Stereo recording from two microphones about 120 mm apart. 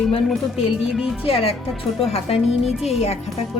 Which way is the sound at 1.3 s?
55° left (ahead or behind).